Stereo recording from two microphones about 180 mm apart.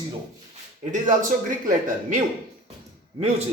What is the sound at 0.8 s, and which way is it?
Speech, 45° right (ahead or behind).